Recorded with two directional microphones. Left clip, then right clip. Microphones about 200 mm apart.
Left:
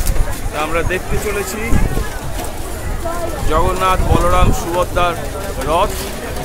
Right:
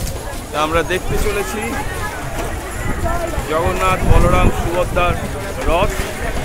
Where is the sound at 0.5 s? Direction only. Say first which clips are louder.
Right 2 dB; 15° right (ahead or behind).